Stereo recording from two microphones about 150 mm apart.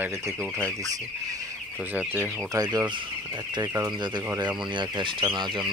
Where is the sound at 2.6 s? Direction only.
25° right (ahead or behind).